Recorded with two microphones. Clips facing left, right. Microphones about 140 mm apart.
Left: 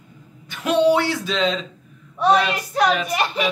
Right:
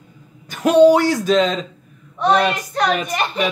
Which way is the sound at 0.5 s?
45° right (ahead or behind).